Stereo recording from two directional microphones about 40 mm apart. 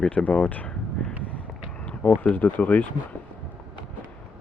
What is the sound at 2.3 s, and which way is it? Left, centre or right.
Speech, left.